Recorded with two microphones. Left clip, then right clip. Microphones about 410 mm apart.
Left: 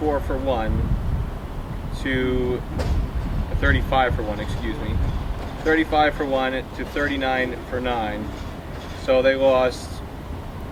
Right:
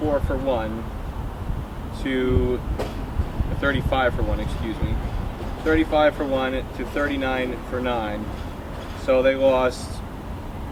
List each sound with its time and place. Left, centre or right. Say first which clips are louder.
0.1 s speech: even; centre
2.0 s speech: even; centre
3.6 s speech: left 1 dB; centre
5.6 s speech: even; centre